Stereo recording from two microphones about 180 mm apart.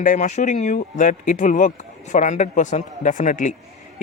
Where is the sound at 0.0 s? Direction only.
45° left (ahead or behind).